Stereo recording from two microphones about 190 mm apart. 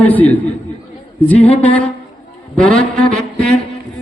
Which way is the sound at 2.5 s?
5° left (ahead or behind).